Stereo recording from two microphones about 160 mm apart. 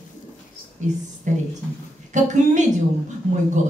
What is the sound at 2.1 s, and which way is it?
Speech, 50° right (ahead or behind).